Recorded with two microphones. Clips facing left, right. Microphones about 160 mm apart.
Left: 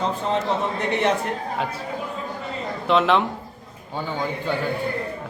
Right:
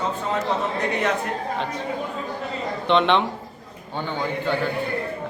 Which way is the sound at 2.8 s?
5° left (ahead or behind).